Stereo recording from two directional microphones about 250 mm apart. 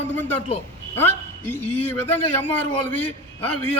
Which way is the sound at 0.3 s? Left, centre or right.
Left.